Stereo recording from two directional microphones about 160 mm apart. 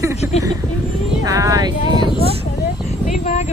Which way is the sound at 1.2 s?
20° right (ahead or behind).